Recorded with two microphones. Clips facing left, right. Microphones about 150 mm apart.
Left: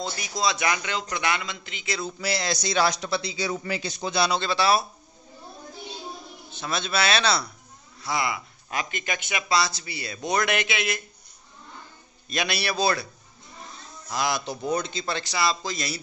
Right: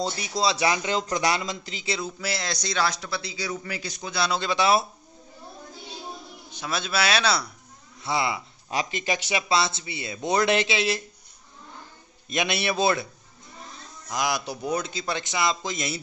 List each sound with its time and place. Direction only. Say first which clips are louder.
0.0 s a man's voice: right 2 dB; 30° right (ahead or behind)
2.1 s a man's voice: left 3 dB; centre (ahead or behind); by 4.2 s 25° left (ahead or behind)
4.4 s speech: right 1 dB; 20° right (ahead or behind)
6.5 s speech: even; 10° right (ahead or behind)
8.0 s speech: right 1 dB; 25° right (ahead or behind)
12.3 s speech: right 2 dB; 20° right (ahead or behind)